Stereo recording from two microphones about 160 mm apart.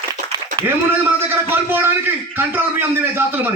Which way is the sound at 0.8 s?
15° right (ahead or behind).